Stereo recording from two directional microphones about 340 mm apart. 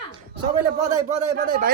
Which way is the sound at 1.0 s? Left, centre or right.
Right.